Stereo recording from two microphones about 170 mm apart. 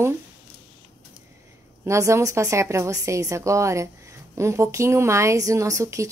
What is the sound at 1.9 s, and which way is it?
Speech, 15° right (ahead or behind).